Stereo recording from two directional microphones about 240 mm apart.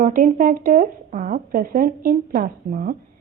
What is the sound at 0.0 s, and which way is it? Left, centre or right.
A woman's voice, right.